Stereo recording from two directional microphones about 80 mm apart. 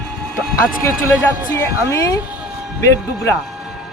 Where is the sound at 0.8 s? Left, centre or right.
Left.